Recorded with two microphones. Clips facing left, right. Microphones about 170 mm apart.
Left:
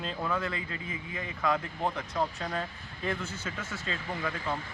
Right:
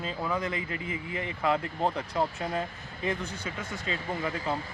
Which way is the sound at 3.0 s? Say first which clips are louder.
Right 2 dB; 15° right (ahead or behind).